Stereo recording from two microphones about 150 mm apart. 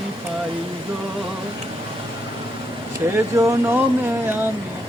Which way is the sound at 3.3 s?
20° right (ahead or behind).